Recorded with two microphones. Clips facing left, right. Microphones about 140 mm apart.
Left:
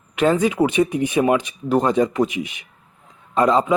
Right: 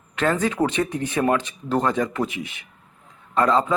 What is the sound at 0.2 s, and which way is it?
A man's voice, 15° left (ahead or behind).